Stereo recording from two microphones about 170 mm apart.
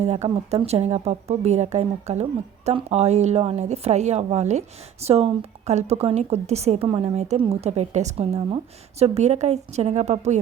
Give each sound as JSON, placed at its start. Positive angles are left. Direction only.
{"t": 0.0, "sound": "speech", "side_deg": -40}